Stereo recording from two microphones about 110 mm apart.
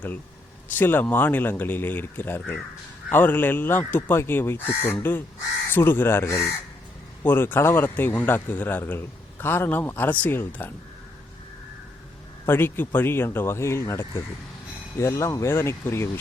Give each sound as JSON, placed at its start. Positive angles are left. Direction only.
{"t": 0.7, "sound": "speech", "side_deg": 20}
{"t": 12.5, "sound": "speech", "side_deg": 20}